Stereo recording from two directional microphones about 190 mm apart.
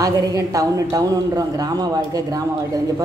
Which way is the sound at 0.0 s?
20° right (ahead or behind).